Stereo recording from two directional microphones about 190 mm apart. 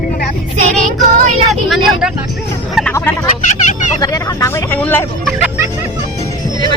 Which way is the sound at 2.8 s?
5° right (ahead or behind).